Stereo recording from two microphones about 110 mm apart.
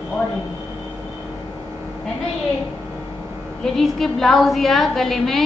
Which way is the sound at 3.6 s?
5° left (ahead or behind).